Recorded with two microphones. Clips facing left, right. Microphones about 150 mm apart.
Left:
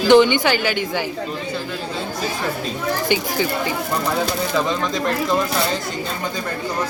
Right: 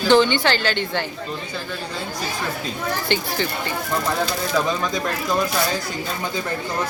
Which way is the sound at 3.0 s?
10° left (ahead or behind).